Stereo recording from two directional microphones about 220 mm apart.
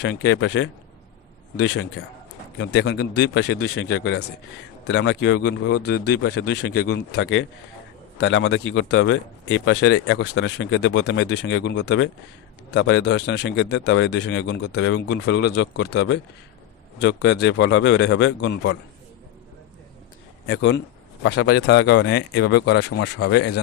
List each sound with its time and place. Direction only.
0.0 s a man's voice: 50° left (ahead or behind)
20.5 s a man's voice: 55° left (ahead or behind)